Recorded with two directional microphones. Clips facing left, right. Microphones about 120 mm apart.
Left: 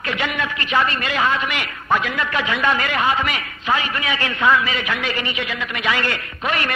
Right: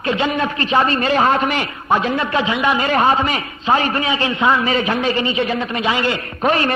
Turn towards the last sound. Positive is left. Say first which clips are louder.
# right 6 dB
turn(degrees=-35)  # may be behind; listen again after turning